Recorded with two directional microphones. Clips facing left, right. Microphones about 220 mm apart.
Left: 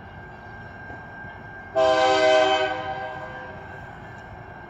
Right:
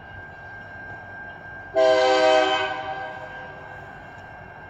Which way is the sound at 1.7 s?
15° right (ahead or behind).